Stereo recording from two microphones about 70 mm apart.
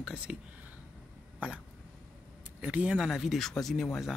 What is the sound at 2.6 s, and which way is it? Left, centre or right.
Speech, centre.